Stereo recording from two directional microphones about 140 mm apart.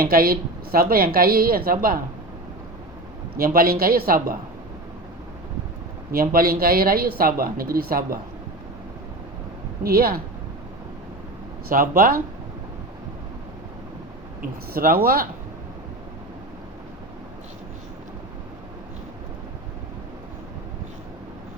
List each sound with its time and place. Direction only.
0.0 s a woman's voice: 90° right
3.3 s a woman's voice: 90° right
6.1 s a woman's voice: 90° right
9.8 s a woman's voice: 90° right
11.7 s a woman's voice: 90° right
14.7 s a woman's voice: 90° right